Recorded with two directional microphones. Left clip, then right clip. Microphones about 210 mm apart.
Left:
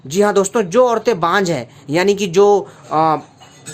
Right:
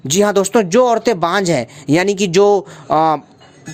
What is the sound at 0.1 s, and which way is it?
Speech, 40° right (ahead or behind).